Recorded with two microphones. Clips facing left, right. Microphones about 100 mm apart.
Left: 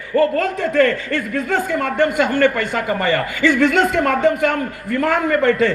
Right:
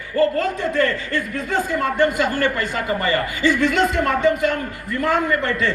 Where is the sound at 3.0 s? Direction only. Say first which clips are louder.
Left 2 dB; 70° left (ahead or behind).